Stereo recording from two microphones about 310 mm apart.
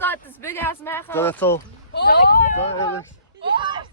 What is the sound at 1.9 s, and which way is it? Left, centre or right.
Speech, left.